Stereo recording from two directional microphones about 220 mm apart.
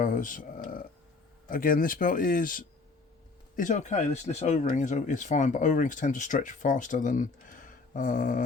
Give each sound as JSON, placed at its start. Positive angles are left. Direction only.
{"t": 0.0, "sound": "speech", "side_deg": 35}